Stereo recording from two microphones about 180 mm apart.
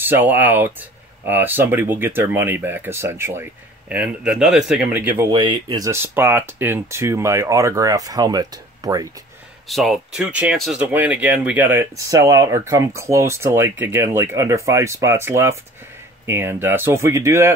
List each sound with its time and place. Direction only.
0.0 s speech: 10° right (ahead or behind)
5.3 s speech: 25° right (ahead or behind)
9.7 s speech: centre (ahead or behind)